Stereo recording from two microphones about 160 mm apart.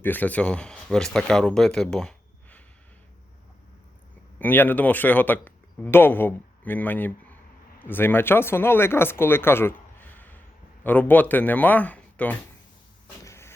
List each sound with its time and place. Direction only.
0.0 s speech: 10° left (ahead or behind)
4.4 s speech: 10° left (ahead or behind)
13.2 s a sound: 15° left (ahead or behind)